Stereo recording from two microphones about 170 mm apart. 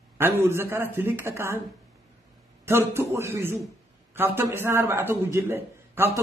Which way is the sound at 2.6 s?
15° right (ahead or behind).